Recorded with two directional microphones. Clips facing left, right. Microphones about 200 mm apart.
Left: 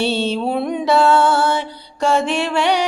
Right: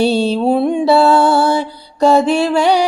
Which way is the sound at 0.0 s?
40° right (ahead or behind).